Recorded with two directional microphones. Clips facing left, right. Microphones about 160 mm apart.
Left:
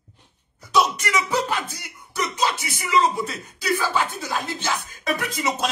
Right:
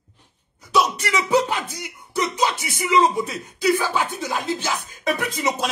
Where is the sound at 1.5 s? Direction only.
20° right (ahead or behind).